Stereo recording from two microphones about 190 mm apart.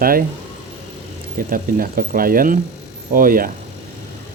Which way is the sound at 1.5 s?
50° right (ahead or behind).